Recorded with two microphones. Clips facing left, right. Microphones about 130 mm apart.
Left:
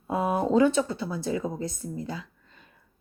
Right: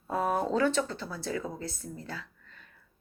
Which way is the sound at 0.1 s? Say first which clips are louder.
Left 4 dB; 10° left (ahead or behind).